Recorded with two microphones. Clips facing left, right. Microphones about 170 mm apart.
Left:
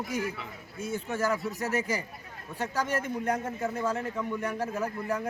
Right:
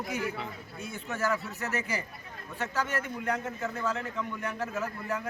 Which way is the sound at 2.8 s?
40° left (ahead or behind).